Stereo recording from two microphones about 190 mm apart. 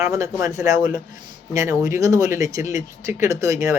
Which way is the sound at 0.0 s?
15° right (ahead or behind).